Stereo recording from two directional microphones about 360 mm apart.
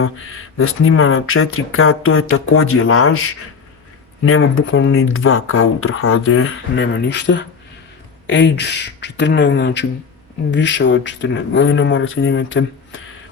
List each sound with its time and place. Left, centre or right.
0.6 s speech: left